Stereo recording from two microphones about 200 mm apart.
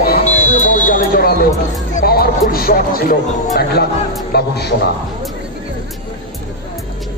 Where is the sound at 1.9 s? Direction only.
50° left (ahead or behind).